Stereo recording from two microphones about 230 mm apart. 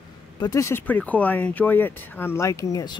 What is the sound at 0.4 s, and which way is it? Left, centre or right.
Speech, centre.